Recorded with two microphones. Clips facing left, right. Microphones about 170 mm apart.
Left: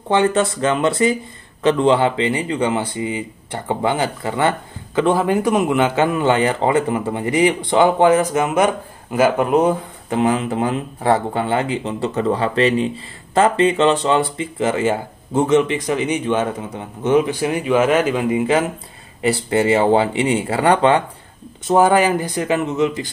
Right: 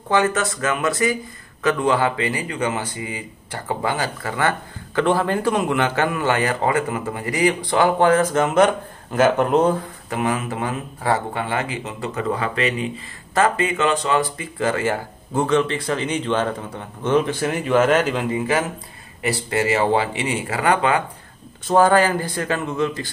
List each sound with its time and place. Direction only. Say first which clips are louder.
0.1 s speech: left 3 dB; 25° left (ahead or behind); by 18.2 s 5° left (ahead or behind)
18.3 s speech: left 4 dB; 25° left (ahead or behind)
21.6 s speech: left 2 dB; 20° left (ahead or behind)